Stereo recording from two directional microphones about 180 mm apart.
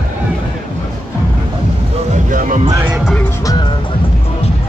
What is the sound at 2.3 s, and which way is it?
Music, 45° right (ahead or behind).